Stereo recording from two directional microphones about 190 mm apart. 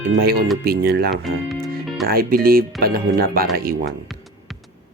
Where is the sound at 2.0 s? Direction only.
50° right (ahead or behind).